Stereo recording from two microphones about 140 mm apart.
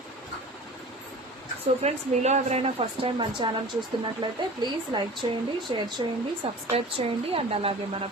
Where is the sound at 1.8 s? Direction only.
50° right (ahead or behind).